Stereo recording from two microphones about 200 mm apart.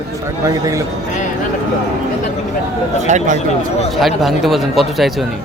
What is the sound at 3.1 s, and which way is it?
Speech, 35° right (ahead or behind).